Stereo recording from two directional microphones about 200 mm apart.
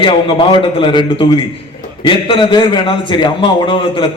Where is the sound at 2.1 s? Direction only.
25° left (ahead or behind).